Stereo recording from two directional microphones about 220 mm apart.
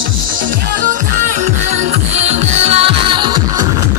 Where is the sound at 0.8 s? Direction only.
35° right (ahead or behind).